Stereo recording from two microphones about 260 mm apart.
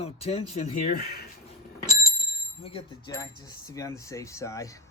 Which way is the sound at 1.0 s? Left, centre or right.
Left.